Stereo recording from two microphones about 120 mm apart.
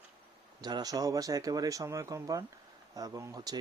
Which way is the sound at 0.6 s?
35° right (ahead or behind).